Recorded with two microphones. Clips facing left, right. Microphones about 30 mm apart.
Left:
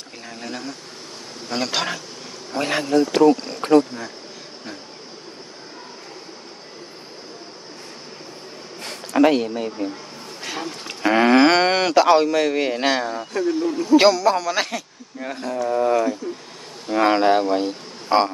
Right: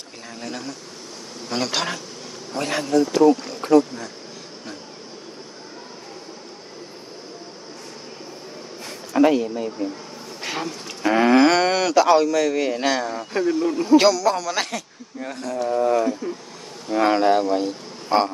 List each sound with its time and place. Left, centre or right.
0.3 s a man's voice: centre
3.1 s speech: left
8.8 s a sound: left
10.4 s a sound: centre
10.8 s speech: left
13.5 s speech: centre
13.9 s a man's voice: left